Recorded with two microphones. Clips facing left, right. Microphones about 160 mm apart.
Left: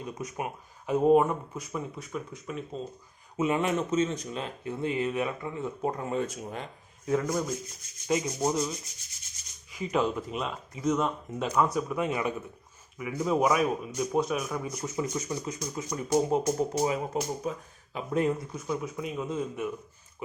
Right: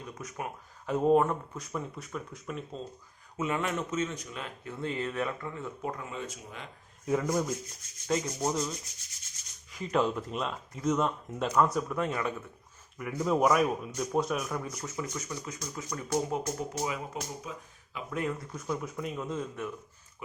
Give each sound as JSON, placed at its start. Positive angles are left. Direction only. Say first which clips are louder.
{"t": 0.0, "sound": "speech", "louder": "left 4 dB", "side_deg": 15}
{"t": 3.3, "sound": "speech", "louder": "left 5 dB", "side_deg": 20}
{"t": 6.1, "sound": "speech", "louder": "left 9 dB", "side_deg": 45}
{"t": 7.0, "sound": "speech", "louder": "left 1 dB", "side_deg": 0}
{"t": 8.0, "sound": "speech", "louder": "left 3 dB", "side_deg": 10}
{"t": 9.7, "sound": "speech", "louder": "left 1 dB", "side_deg": 5}
{"t": 14.7, "sound": "speech", "louder": "left 5 dB", "side_deg": 20}
{"t": 17.5, "sound": "speech", "louder": "left 8 dB", "side_deg": 50}
{"t": 17.9, "sound": "speech", "louder": "left 6 dB", "side_deg": 30}
{"t": 18.3, "sound": "speech", "louder": "left 2 dB", "side_deg": 5}